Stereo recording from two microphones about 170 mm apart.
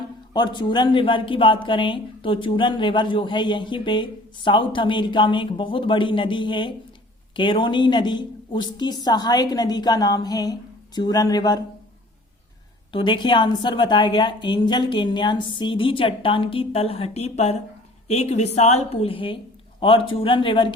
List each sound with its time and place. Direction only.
0.3 s speech: 25° left (ahead or behind)
12.9 s a woman's voice: 30° left (ahead or behind)